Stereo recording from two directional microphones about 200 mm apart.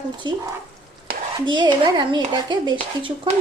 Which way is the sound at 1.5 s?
25° right (ahead or behind).